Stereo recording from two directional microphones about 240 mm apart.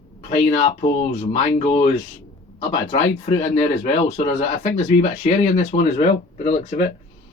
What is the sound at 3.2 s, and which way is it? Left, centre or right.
Speech, left.